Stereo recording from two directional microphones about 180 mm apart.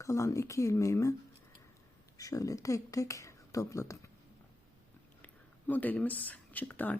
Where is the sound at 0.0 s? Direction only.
15° left (ahead or behind).